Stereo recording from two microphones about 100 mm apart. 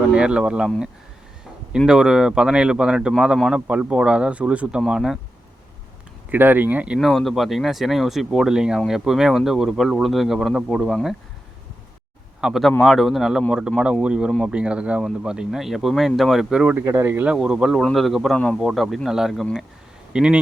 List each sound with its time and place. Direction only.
0.1 s speech: 10° right (ahead or behind)
1.9 s speech: 5° right (ahead or behind)
6.3 s speech: 20° right (ahead or behind)
7.0 s speech: 5° left (ahead or behind)
12.4 s speech: 5° right (ahead or behind)
16.8 s speech: 25° right (ahead or behind)
17.3 s speech: 5° right (ahead or behind)